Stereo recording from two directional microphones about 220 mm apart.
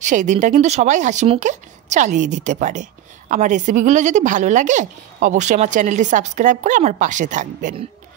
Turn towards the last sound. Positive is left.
turn(degrees=-35)  # may be behind; listen again after turning